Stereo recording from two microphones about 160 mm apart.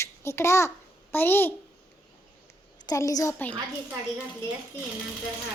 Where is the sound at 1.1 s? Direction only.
15° left (ahead or behind).